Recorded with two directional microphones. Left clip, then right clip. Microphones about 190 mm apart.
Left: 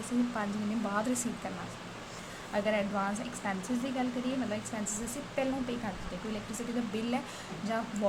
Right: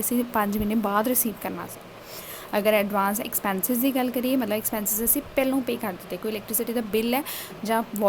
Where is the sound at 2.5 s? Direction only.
60° right (ahead or behind).